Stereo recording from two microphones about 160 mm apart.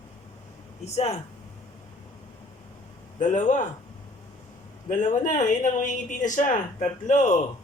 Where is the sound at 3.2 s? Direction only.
50° left (ahead or behind).